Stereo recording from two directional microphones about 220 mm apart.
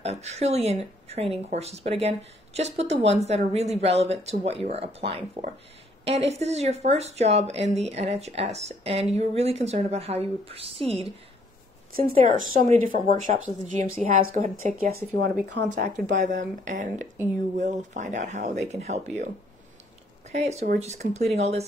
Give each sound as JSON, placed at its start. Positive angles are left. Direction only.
{"t": 0.0, "sound": "speech", "side_deg": -30}
{"t": 14.8, "sound": "speech", "side_deg": -45}